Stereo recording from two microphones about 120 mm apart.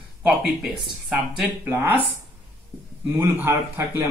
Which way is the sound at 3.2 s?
20° right (ahead or behind).